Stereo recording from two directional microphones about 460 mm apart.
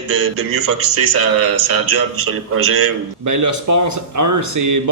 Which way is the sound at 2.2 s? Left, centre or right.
Right.